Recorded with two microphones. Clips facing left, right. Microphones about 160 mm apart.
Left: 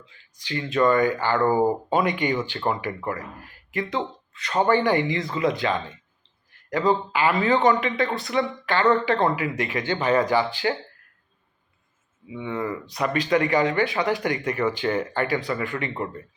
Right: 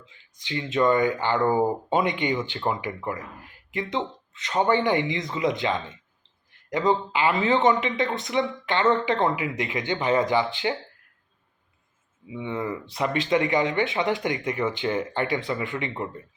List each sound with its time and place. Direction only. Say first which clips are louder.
0.0 s speech: even; 20° right (ahead or behind)
12.3 s speech: left 1 dB; 25° right (ahead or behind)